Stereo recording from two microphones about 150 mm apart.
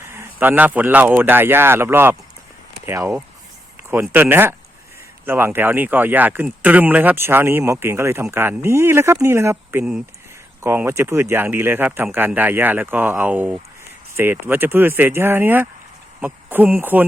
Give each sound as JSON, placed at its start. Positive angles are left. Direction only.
{"t": 0.0, "sound": "speech", "side_deg": -15}